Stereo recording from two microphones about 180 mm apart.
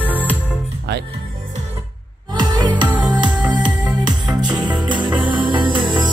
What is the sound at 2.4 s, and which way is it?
Music, 25° right (ahead or behind).